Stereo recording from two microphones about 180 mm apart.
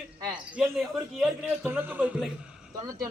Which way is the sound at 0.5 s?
Centre (ahead or behind).